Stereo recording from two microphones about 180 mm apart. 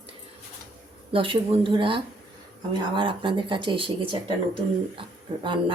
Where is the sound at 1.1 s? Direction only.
30° right (ahead or behind).